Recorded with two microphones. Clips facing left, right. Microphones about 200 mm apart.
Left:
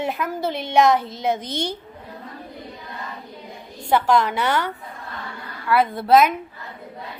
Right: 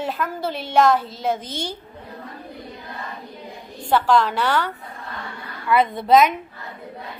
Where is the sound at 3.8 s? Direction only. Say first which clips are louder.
Even; 10° left (ahead or behind).